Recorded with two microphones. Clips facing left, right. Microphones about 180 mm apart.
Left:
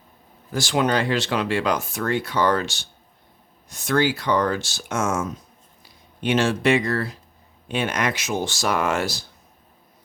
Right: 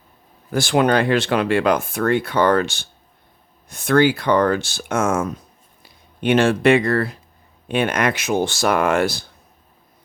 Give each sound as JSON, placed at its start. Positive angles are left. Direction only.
{"t": 0.5, "sound": "speech", "side_deg": -55}